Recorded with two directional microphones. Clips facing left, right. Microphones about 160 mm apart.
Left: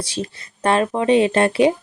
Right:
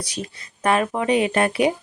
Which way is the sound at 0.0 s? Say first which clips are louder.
Left 4 dB; 30° left (ahead or behind).